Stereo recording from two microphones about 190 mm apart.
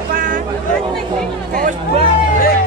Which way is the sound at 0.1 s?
45° right (ahead or behind).